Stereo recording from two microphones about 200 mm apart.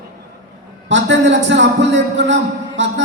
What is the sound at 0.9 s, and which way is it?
Speech, 65° right (ahead or behind).